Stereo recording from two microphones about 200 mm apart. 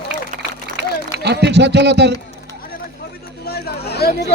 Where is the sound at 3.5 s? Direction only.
55° left (ahead or behind).